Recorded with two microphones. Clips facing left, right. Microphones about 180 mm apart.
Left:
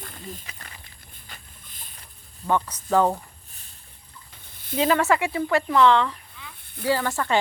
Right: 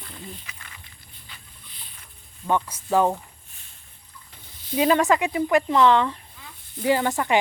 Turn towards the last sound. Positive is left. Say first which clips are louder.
# right 2 dB
turn(degrees=-15)  # may be behind; listen again after turning